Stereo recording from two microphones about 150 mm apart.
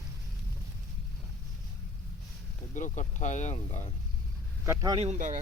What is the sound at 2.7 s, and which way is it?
Speech, 55° left (ahead or behind).